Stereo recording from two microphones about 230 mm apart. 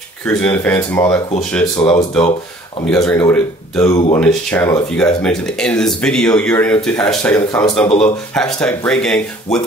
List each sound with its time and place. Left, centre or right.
0.3 s speech: centre
2.9 s speech: centre